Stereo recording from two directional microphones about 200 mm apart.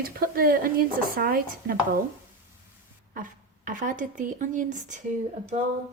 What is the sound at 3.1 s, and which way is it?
Speech, 40° right (ahead or behind).